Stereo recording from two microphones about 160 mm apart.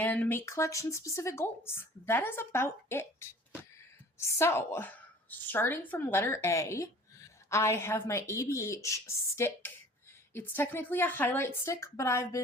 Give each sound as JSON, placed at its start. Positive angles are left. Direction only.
{"t": 0.0, "sound": "a woman's voice", "side_deg": 10}